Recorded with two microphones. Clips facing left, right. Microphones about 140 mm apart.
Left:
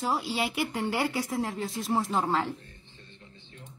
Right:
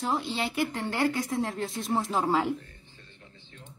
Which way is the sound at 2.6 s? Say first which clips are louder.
Even; 25° left (ahead or behind).